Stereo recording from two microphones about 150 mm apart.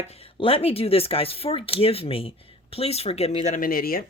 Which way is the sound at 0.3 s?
40° left (ahead or behind).